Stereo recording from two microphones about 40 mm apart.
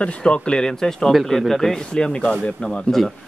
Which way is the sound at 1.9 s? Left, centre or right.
Left.